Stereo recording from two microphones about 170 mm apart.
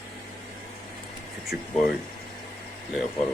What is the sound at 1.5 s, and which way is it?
Speech, 60° left (ahead or behind).